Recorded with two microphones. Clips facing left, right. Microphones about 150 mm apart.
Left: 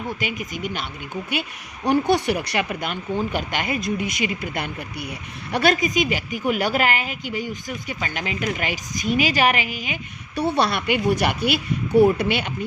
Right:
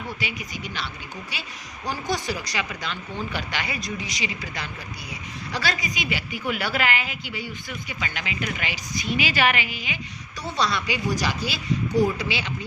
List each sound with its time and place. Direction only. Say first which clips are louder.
0.2 s speech: left 5 dB; 50° left (ahead or behind)